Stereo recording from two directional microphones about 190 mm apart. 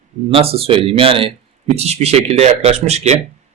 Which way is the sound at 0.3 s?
30° right (ahead or behind).